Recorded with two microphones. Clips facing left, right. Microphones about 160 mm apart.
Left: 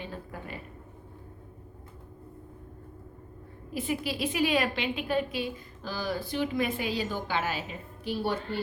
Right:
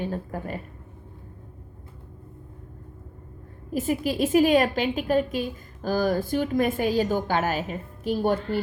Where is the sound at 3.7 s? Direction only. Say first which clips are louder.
Right 6 dB; 45° right (ahead or behind).